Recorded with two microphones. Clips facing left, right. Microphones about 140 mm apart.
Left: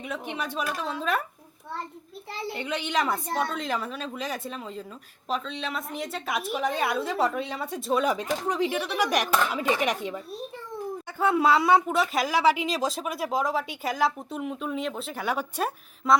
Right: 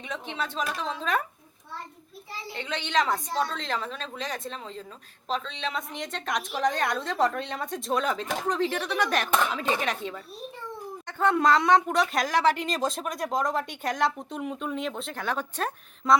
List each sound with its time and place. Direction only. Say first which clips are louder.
0.0 s a woman's voice: left 1 dB; 10° left (ahead or behind)
2.6 s a woman's voice: right 1 dB; 10° left (ahead or behind)
11.2 s speech: even; 5° left (ahead or behind)